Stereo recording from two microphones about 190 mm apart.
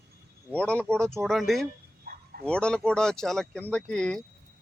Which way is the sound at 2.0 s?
50° right (ahead or behind).